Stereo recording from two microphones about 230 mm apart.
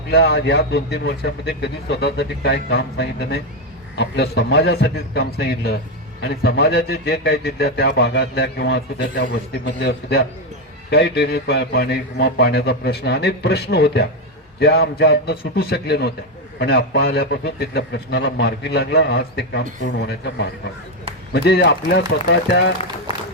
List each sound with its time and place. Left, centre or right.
0.1 s a man's voice: left